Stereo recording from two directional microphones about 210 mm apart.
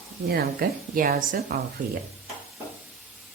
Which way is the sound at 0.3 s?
45° right (ahead or behind).